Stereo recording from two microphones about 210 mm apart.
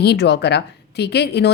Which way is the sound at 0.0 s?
50° left (ahead or behind).